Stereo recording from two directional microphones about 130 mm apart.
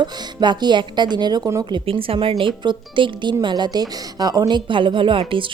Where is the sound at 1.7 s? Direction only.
45° right (ahead or behind).